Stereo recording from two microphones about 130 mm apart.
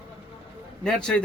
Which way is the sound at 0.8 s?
5° left (ahead or behind).